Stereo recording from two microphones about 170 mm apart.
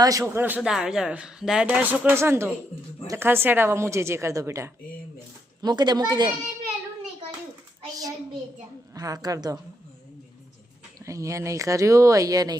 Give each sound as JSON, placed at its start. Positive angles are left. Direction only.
{"t": 0.0, "sound": "a man's voice", "side_deg": -20}
{"t": 9.0, "sound": "speech", "side_deg": -20}
{"t": 11.0, "sound": "speech", "side_deg": -20}